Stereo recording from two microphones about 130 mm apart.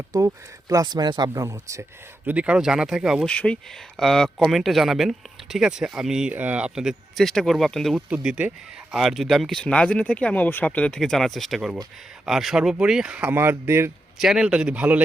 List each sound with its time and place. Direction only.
0.1 s speech: 25° right (ahead or behind)
2.2 s speech: 10° right (ahead or behind)
3.2 s speech: 10° left (ahead or behind)
8.1 s speech: 10° right (ahead or behind)
14.2 s speech: 5° right (ahead or behind)